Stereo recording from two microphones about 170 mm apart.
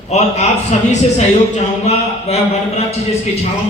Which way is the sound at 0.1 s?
40° left (ahead or behind).